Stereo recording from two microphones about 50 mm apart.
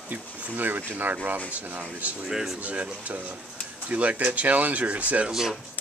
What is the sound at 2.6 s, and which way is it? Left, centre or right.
Speech, right.